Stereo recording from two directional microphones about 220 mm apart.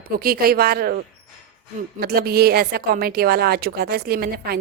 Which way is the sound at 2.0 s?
45° right (ahead or behind).